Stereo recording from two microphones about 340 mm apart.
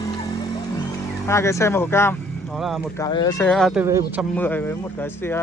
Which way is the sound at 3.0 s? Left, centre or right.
Centre.